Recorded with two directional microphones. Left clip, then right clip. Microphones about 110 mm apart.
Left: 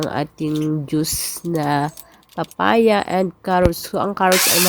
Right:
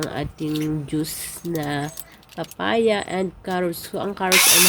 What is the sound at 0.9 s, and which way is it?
Speech, 70° left (ahead or behind).